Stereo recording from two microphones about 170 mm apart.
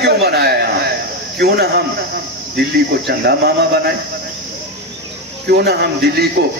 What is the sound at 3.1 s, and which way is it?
Speech, 70° right (ahead or behind).